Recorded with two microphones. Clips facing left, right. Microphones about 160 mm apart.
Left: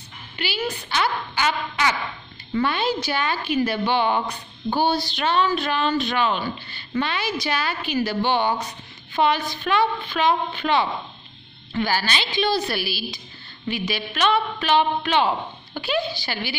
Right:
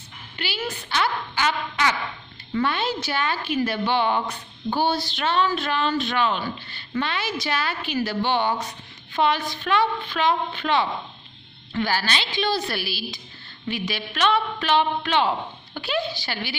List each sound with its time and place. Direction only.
0.4 s a woman's voice: centre (ahead or behind)